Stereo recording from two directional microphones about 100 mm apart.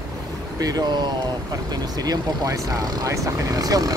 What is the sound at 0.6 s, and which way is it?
Speech, 40° right (ahead or behind).